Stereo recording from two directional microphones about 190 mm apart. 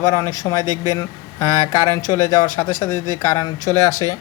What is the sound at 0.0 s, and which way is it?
Speech, 20° left (ahead or behind).